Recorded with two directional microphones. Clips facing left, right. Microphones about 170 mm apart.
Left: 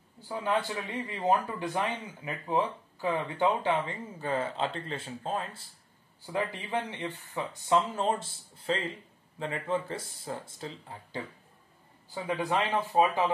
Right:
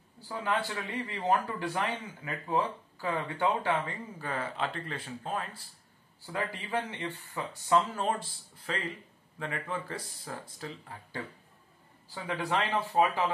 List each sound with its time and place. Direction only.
0.3 s speech: 20° left (ahead or behind)